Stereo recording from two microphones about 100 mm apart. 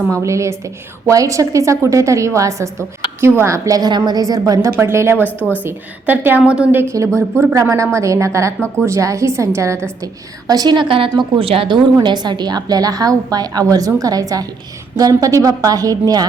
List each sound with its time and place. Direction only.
0.1 s a woman's voice: 30° right (ahead or behind)
4.8 s a woman's voice: 25° right (ahead or behind)
5.1 s a woman's voice: 20° left (ahead or behind)
5.6 s a woman's voice: 20° right (ahead or behind); by 11.7 s 65° right (ahead or behind)
12.0 s a woman's voice: 45° right (ahead or behind)